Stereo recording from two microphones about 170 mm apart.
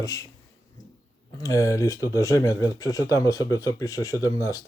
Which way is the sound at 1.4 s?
20° left (ahead or behind).